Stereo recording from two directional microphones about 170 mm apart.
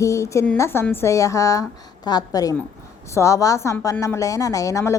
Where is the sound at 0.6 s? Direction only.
15° left (ahead or behind).